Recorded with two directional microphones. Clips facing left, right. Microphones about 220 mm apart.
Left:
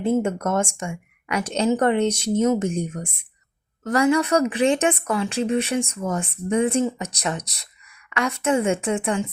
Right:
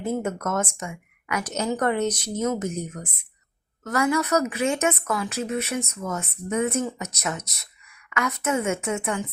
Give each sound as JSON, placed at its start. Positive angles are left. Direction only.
{"t": 0.0, "sound": "a woman's voice", "side_deg": 30}